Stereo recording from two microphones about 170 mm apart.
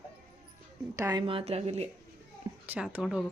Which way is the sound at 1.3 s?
35° right (ahead or behind).